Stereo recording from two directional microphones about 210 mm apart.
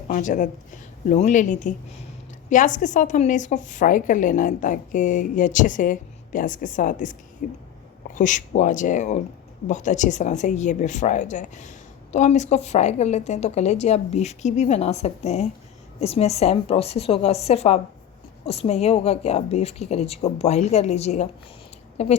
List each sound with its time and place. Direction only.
0.1 s a woman's voice: 40° left (ahead or behind)